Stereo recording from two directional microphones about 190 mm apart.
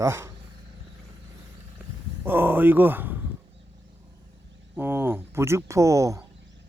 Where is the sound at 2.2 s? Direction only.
10° right (ahead or behind).